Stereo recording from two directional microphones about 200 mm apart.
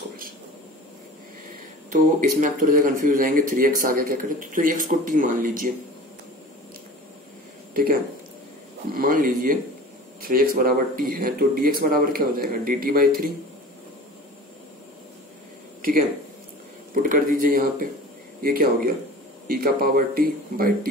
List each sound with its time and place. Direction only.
1.9 s speech: 40° right (ahead or behind)
7.7 s speech: 45° right (ahead or behind)
16.9 s speech: 45° right (ahead or behind)